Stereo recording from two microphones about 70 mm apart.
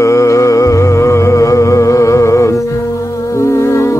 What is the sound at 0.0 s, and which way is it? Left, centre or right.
Music, left.